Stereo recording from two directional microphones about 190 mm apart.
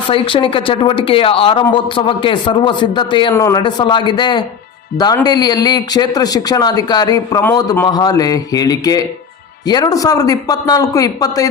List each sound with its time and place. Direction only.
0.1 s a man's voice: 25° left (ahead or behind)